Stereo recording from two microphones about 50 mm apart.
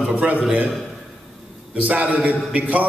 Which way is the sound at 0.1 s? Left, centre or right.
Right.